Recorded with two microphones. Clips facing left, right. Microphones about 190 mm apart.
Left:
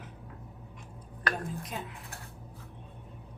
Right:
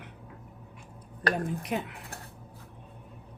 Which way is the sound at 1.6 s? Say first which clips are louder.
Right 7 dB; 65° right (ahead or behind).